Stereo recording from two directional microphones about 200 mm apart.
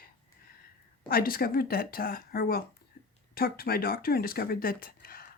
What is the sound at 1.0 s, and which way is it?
Speech, 45° left (ahead or behind).